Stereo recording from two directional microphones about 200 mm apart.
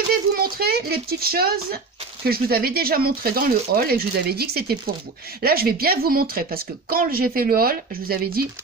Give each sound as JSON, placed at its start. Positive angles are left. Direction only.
{"t": 0.3, "sound": "speech", "side_deg": -50}